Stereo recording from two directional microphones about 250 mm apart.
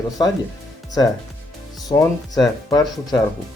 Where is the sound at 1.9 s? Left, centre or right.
Centre.